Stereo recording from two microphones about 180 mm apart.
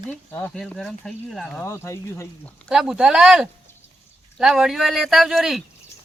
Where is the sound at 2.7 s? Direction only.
5° right (ahead or behind).